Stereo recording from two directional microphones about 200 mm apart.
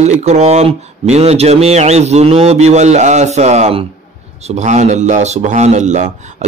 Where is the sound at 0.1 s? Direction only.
35° right (ahead or behind).